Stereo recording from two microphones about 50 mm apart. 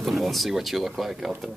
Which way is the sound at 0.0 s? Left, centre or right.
Centre.